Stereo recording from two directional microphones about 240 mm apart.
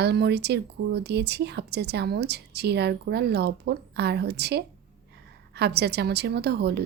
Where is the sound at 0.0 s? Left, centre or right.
Right.